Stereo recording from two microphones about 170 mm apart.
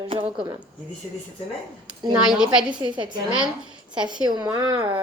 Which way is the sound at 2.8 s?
25° right (ahead or behind).